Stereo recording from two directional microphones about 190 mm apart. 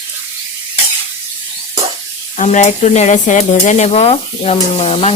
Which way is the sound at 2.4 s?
40° left (ahead or behind).